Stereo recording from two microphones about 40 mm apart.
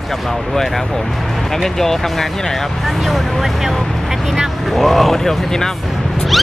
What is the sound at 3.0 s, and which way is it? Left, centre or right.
Speech, centre.